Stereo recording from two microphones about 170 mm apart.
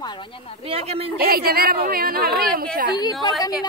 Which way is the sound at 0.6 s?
35° right (ahead or behind).